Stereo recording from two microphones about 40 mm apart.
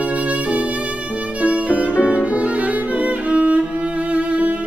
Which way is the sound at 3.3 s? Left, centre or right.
Right.